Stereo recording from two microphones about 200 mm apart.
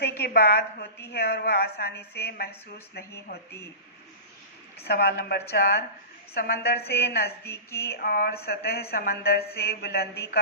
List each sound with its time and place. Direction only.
0.2 s a woman's voice: 50° left (ahead or behind)
3.0 s a woman's voice: 15° left (ahead or behind)
4.8 s a woman's voice: 50° left (ahead or behind)
7.4 s a woman's voice: 10° left (ahead or behind)
7.9 s a woman's voice: 50° left (ahead or behind)